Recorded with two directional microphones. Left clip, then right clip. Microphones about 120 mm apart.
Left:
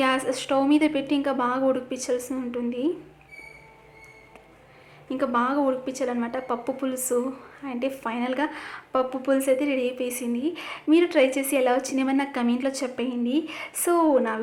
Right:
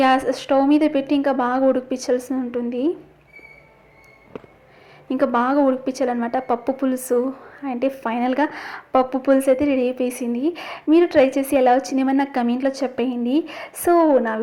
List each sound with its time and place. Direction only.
0.0 s a woman's voice: 35° right (ahead or behind)
5.0 s a woman's voice: 50° right (ahead or behind); by 14.3 s 30° right (ahead or behind)